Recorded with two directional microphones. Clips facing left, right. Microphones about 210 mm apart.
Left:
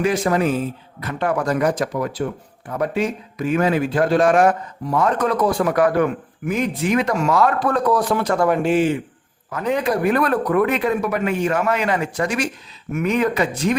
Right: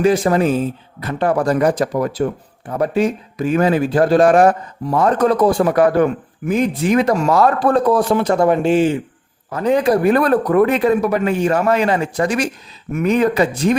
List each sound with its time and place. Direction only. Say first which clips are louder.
0.0 s speech: right 4 dB; 30° right (ahead or behind)